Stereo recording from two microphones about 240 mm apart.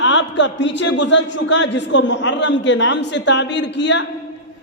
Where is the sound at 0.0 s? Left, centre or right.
Left.